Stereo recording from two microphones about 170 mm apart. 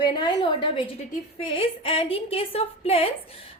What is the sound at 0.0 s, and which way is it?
A woman's voice, 25° left (ahead or behind).